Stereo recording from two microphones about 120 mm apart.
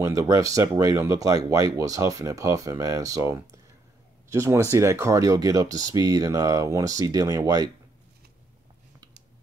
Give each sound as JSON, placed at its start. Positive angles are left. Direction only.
{"t": 0.0, "sound": "speech", "side_deg": -25}